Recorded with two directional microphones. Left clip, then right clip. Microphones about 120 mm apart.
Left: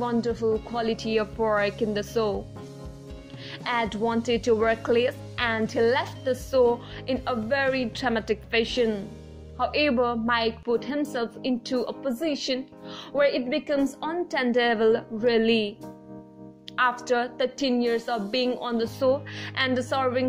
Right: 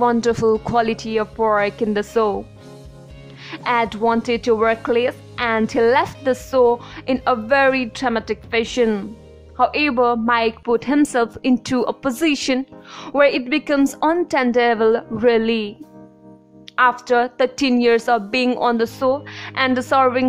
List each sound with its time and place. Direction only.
0.0 s speech: 65° right (ahead or behind)
0.8 s speech: 40° right (ahead or behind)
3.4 s speech: 40° right (ahead or behind)
5.8 s a woman's voice: 45° right (ahead or behind)
8.1 s speech: 25° right (ahead or behind)
8.7 s a woman's voice: 50° right (ahead or behind)
9.6 s a woman's voice: 40° right (ahead or behind); by 12.5 s 70° right (ahead or behind)
12.9 s speech: 35° right (ahead or behind)
13.2 s a woman's voice: 55° right (ahead or behind)
14.4 s speech: 30° right (ahead or behind)
16.7 s speech: 40° right (ahead or behind)
17.6 s a woman's voice: 60° right (ahead or behind)
19.0 s speech: 30° right (ahead or behind)
19.7 s a woman's voice: 45° right (ahead or behind)